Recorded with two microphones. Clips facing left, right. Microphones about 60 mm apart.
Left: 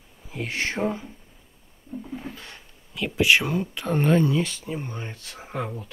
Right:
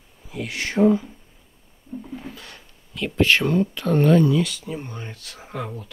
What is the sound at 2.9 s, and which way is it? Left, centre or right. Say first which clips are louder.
Speech: right 1 dB; centre.